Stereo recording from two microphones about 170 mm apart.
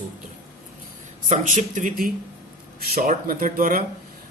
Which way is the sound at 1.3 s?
50° right (ahead or behind).